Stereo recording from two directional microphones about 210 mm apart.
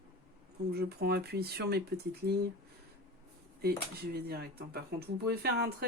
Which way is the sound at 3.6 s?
50° right (ahead or behind).